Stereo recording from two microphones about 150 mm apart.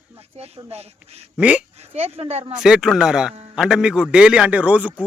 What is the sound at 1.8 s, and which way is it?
Speech, 45° right (ahead or behind).